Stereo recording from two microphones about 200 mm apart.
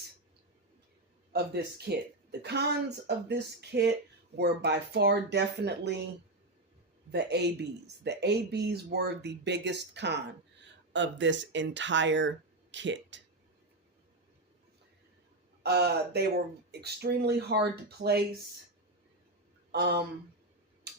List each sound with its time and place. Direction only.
1.3 s speech: 55° right (ahead or behind)
7.1 s speech: 55° right (ahead or behind)
15.6 s speech: 55° right (ahead or behind)
19.7 s speech: 55° right (ahead or behind)
20.9 s tick-tock: 55° right (ahead or behind)